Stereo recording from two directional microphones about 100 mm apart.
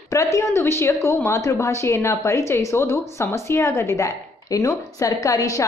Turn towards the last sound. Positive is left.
turn(degrees=35)  # may be behind; listen again after turning